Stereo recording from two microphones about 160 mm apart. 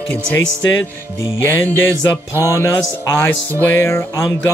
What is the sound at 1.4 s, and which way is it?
Speech, 10° left (ahead or behind).